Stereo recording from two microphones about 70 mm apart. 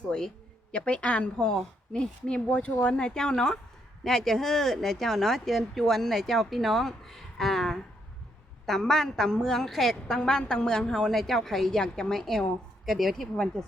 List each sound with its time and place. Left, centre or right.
0.0 s a woman's voice: centre